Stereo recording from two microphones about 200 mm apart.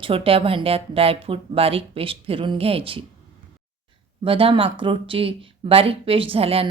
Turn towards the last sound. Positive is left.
turn(degrees=-30)  # may be behind; listen again after turning